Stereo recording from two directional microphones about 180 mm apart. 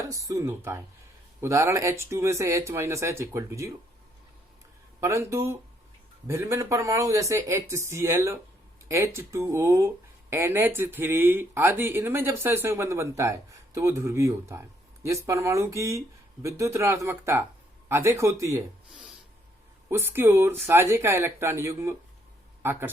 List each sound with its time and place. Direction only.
0.0 s speech: 15° right (ahead or behind)
4.9 s speech: 15° right (ahead or behind)
19.9 s speech: 10° right (ahead or behind)